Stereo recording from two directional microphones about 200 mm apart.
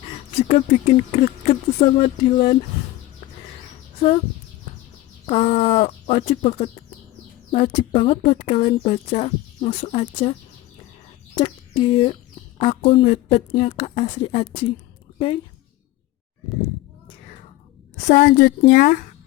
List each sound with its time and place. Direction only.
0.4 s speech: 35° left (ahead or behind)
5.2 s speech: 35° left (ahead or behind)
11.3 s speech: 25° left (ahead or behind)
18.1 s speech: 50° left (ahead or behind)